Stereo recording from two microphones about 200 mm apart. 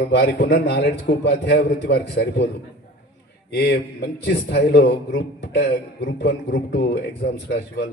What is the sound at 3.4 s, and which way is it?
A man's voice, 60° left (ahead or behind).